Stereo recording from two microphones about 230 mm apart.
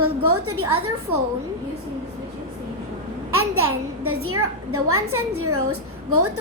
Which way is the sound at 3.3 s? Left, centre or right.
Right.